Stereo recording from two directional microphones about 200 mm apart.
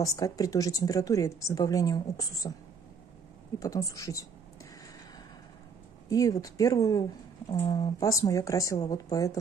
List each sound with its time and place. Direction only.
0.0 s a woman's voice: 15° left (ahead or behind)
3.5 s a woman's voice: 15° left (ahead or behind)
6.0 s a woman's voice: 15° left (ahead or behind)